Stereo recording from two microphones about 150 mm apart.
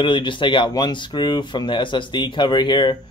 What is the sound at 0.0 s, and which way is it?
A man's voice, 35° left (ahead or behind).